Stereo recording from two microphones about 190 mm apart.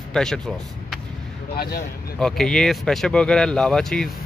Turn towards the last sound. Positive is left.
turn(degrees=5)  # may be behind; listen again after turning